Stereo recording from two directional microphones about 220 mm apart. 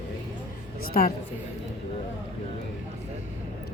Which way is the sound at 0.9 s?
40° left (ahead or behind).